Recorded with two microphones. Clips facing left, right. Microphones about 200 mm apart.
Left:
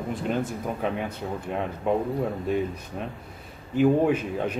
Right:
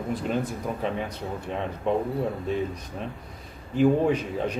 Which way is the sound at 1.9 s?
5° left (ahead or behind).